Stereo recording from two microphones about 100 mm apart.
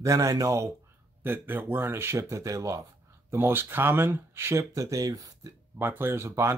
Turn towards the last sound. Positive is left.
turn(degrees=-25)  # may be behind; listen again after turning